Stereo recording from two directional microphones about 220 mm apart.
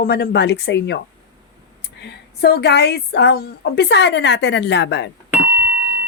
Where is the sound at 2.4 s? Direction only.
45° left (ahead or behind).